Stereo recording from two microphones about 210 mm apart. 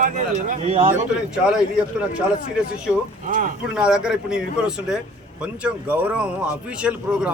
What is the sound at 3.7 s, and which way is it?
A man's voice, 5° right (ahead or behind).